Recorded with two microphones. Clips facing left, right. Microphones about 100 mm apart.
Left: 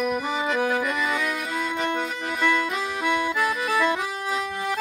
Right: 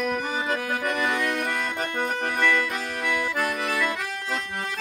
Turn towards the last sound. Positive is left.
turn(degrees=-55)  # may be behind; listen again after turning